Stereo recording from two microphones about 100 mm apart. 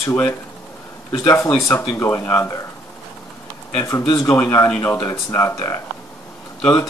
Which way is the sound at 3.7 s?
30° left (ahead or behind).